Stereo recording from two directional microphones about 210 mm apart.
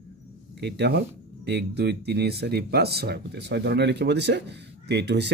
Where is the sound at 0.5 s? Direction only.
55° right (ahead or behind).